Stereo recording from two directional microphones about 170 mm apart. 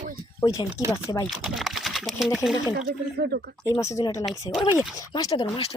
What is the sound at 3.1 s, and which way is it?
Speech, 75° right (ahead or behind).